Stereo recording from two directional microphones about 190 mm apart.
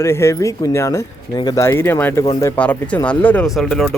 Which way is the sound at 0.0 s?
15° left (ahead or behind).